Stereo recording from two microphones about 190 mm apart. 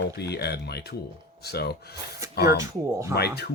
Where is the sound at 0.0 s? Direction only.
60° left (ahead or behind).